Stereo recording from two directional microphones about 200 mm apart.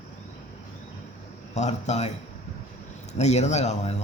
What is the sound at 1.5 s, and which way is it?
Speech, 35° left (ahead or behind).